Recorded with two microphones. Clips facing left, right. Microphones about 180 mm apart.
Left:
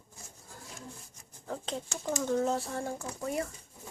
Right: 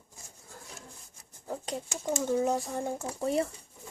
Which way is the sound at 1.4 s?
10° right (ahead or behind).